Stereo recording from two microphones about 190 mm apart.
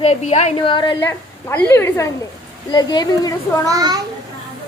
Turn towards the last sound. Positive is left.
turn(degrees=-20)  # may be behind; listen again after turning